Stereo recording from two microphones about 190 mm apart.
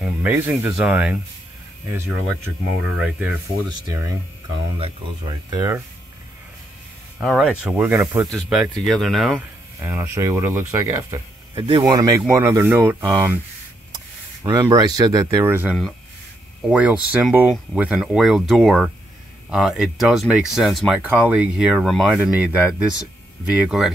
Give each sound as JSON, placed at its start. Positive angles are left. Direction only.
{"t": 0.0, "sound": "speech", "side_deg": -10}
{"t": 3.0, "sound": "speech", "side_deg": -5}
{"t": 3.6, "sound": "speech", "side_deg": -20}
{"t": 7.2, "sound": "speech", "side_deg": 0}
{"t": 8.3, "sound": "speech", "side_deg": 0}
{"t": 9.8, "sound": "speech", "side_deg": -15}
{"t": 14.4, "sound": "speech", "side_deg": -20}